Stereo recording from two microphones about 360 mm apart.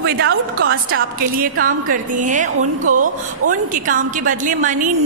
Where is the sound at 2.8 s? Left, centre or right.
Right.